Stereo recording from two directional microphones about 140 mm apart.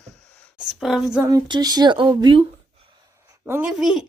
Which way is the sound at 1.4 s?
30° right (ahead or behind).